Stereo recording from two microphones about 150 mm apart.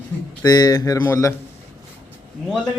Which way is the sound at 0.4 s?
25° left (ahead or behind).